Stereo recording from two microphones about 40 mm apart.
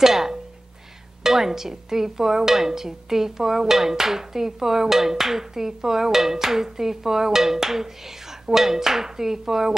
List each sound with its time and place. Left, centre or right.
0.0 s music: centre
1.2 s speech: centre